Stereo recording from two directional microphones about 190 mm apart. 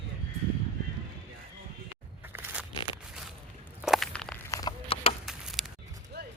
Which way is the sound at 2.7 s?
25° left (ahead or behind).